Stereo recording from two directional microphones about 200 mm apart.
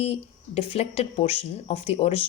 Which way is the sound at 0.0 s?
30° left (ahead or behind).